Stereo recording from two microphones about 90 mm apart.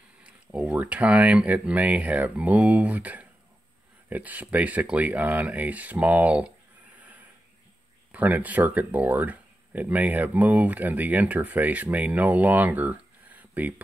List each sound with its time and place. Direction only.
0.2 s speech: 15° right (ahead or behind)
7.0 s a sound: 20° right (ahead or behind)
8.1 s speech: 15° right (ahead or behind)